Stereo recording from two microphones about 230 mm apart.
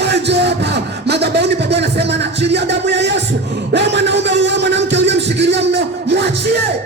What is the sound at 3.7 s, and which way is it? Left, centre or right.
Music, right.